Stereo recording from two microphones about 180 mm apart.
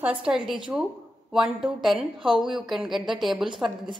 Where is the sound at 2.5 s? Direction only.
Centre (ahead or behind).